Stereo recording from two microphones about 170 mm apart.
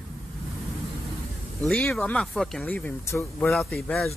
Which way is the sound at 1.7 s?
5° left (ahead or behind).